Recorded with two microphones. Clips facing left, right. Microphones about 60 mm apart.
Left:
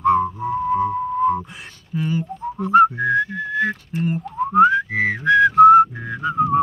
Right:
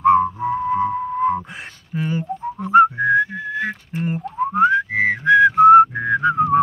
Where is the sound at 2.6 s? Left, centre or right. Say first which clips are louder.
Right 1 dB; centre.